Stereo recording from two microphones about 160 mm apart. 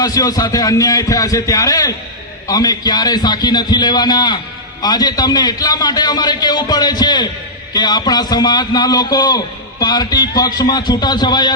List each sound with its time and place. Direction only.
0.0 s a man's voice: 20° left (ahead or behind)